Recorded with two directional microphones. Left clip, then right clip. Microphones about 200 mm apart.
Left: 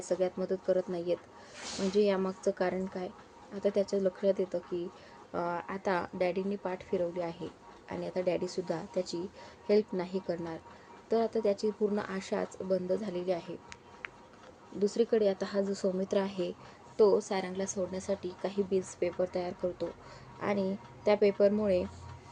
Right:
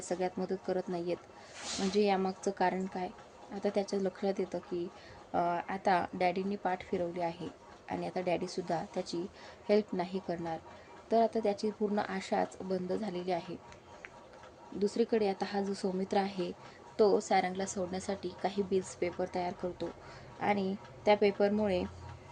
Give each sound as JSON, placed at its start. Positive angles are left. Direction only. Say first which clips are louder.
{"t": 0.0, "sound": "a woman's voice", "louder": "left 4 dB", "side_deg": -15}
{"t": 14.8, "sound": "a woman's voice", "louder": "left 3 dB", "side_deg": -10}